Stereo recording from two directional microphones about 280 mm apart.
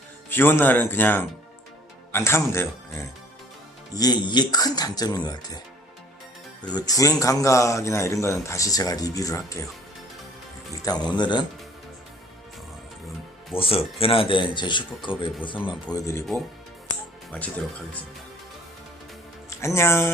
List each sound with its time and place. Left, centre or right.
0.3 s a man's voice: centre
6.6 s a man's voice: centre
10.8 s a man's voice: centre
13.6 s a man's voice: centre
17.3 s speech: centre
19.5 s speech: centre